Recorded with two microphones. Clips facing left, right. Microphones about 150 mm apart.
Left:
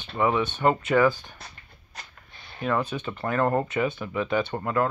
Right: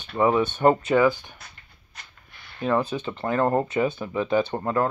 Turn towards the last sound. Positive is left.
turn(degrees=-30)  # may be behind; listen again after turning